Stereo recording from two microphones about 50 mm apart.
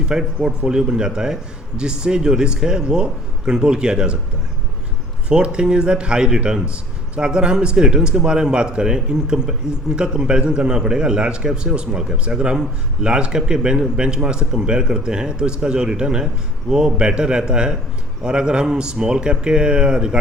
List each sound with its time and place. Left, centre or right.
0.0 s speech: centre
5.3 s speech: centre